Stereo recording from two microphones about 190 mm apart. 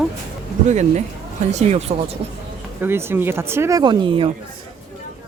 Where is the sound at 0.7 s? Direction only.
40° right (ahead or behind).